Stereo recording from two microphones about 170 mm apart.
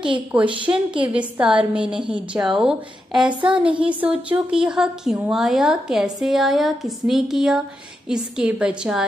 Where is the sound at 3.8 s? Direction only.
5° right (ahead or behind).